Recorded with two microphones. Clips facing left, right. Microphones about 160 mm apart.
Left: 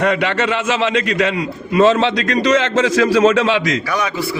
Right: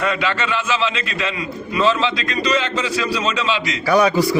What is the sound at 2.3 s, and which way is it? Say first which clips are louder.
Speech: left 8 dB; 90° left.